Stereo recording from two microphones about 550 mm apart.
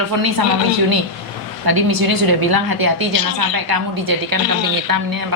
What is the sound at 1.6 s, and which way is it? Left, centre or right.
A woman's voice, right.